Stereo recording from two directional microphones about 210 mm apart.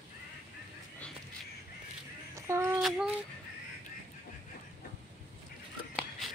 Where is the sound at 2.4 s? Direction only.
15° right (ahead or behind).